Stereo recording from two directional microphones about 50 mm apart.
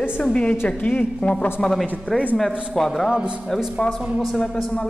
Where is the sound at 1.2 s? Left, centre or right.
Left.